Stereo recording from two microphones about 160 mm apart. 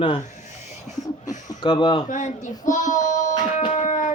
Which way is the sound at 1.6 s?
30° left (ahead or behind).